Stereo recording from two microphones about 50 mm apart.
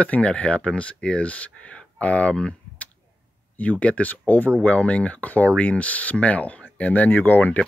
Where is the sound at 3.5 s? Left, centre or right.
Left.